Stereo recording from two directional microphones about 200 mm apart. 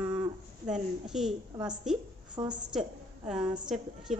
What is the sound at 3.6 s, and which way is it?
Speech, 5° right (ahead or behind).